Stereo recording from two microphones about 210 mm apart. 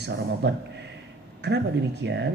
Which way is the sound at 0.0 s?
55° right (ahead or behind).